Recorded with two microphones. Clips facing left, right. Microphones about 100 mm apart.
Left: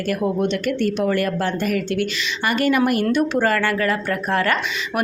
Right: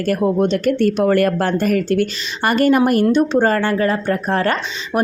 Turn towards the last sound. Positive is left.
turn(degrees=-35)  # may be behind; listen again after turning